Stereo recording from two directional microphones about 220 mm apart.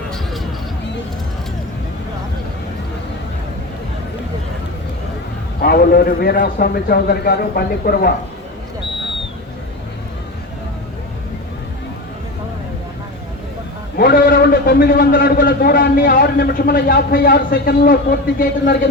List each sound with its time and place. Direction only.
5.5 s a man's voice: 45° left (ahead or behind)
13.9 s a man's voice: 40° left (ahead or behind)